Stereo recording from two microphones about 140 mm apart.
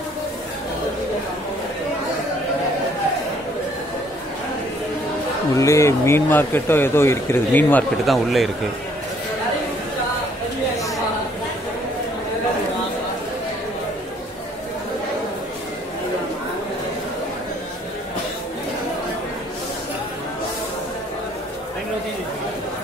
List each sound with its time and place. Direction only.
5.6 s speech: 20° left (ahead or behind)
8.0 s speech: centre (ahead or behind)